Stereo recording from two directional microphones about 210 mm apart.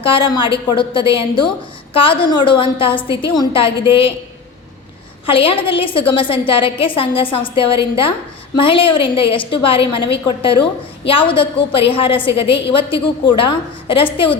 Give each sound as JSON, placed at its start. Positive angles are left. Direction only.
{"t": 0.0, "sound": "a woman's voice", "side_deg": 25}
{"t": 5.2, "sound": "a woman's voice", "side_deg": 25}